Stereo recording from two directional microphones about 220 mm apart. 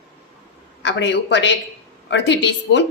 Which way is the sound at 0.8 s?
55° left (ahead or behind).